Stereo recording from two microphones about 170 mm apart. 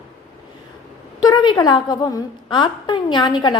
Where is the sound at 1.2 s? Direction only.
25° left (ahead or behind).